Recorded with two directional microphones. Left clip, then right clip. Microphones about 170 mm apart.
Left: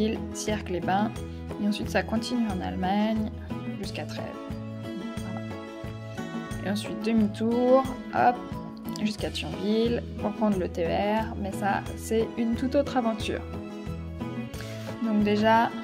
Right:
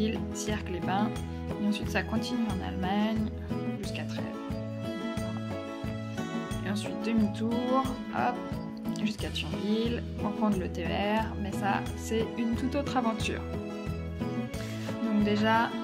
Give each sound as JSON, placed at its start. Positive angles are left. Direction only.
{"t": 0.0, "sound": "speech", "side_deg": 20}
{"t": 2.3, "sound": "music", "side_deg": 0}
{"t": 2.6, "sound": "speech", "side_deg": 20}
{"t": 6.6, "sound": "speech", "side_deg": 20}
{"t": 7.4, "sound": "music", "side_deg": 0}
{"t": 8.1, "sound": "speech", "side_deg": 20}
{"t": 9.7, "sound": "speech", "side_deg": 20}
{"t": 10.2, "sound": "music", "side_deg": 0}
{"t": 10.6, "sound": "speech", "side_deg": 15}
{"t": 15.2, "sound": "speech", "side_deg": 20}